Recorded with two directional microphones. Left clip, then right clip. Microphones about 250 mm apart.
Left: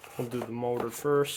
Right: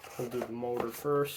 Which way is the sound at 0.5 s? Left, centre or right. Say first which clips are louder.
Left 3 dB; left.